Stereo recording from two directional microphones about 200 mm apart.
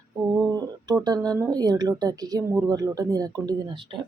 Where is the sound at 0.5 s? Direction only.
20° right (ahead or behind).